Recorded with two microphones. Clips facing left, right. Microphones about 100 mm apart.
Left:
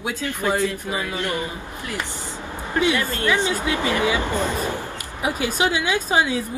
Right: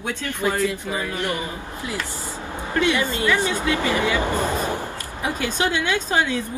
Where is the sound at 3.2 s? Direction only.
20° left (ahead or behind).